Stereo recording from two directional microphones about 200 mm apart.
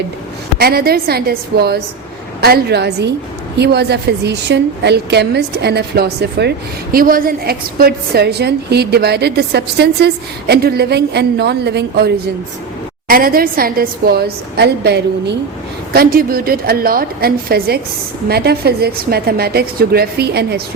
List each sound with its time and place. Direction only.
0.6 s a woman's voice: 50° right (ahead or behind)